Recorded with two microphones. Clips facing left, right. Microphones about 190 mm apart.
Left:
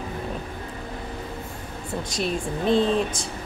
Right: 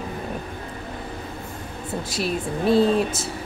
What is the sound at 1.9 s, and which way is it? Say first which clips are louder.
Speech: right 1 dB; 5° right (ahead or behind).